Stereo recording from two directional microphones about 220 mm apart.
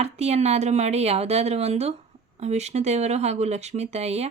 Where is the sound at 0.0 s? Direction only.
30° right (ahead or behind).